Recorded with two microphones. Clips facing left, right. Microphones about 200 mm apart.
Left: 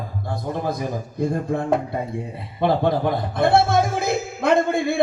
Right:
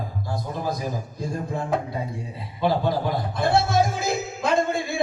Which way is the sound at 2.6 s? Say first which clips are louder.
Left 3 dB; 60° left (ahead or behind).